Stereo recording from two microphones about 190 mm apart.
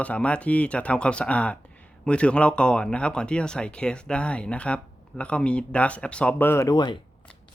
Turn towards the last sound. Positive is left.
turn(degrees=20)  # may be behind; listen again after turning